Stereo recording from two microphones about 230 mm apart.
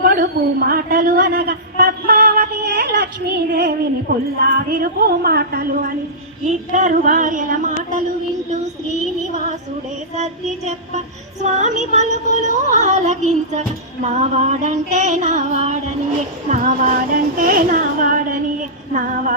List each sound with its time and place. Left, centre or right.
0.0 s a sound: right
4.1 s music: right
11.4 s music: right